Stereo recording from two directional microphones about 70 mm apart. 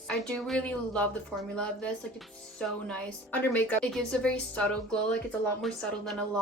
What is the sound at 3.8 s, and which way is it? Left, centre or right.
Speech, centre.